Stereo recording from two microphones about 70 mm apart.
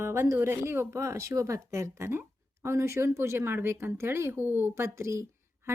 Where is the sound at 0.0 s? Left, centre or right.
Right.